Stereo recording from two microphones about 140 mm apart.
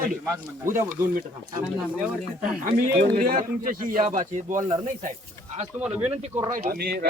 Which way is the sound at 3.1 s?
85° right.